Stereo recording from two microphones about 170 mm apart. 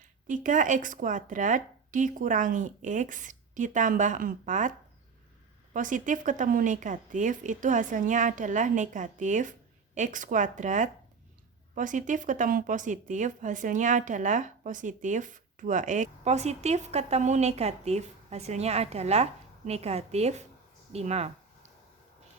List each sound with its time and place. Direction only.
0.3 s speech: 50° right (ahead or behind)
5.7 s speech: 50° right (ahead or behind)
20.9 s a sound: 40° right (ahead or behind)